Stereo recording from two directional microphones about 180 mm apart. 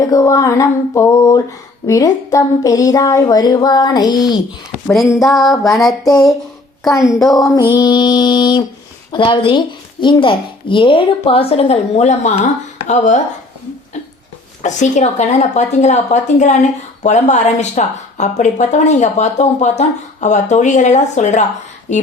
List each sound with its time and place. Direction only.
0.1 s a sound: 20° left (ahead or behind)
1.9 s a woman's voice: 20° left (ahead or behind)
5.2 s music: centre (ahead or behind)
7.7 s a woman's voice: 25° left (ahead or behind); by 13.2 s 40° left (ahead or behind)
14.6 s speech: 40° left (ahead or behind)